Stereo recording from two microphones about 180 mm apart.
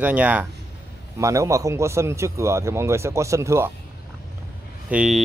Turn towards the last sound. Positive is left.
turn(degrees=-5)  # may be behind; listen again after turning